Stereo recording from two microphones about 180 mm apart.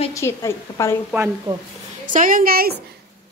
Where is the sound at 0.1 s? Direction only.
15° left (ahead or behind).